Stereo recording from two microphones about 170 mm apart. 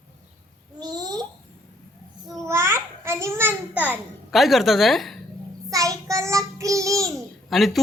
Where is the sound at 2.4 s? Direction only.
15° right (ahead or behind).